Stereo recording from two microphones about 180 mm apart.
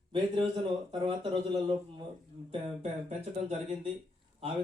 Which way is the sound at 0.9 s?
25° right (ahead or behind).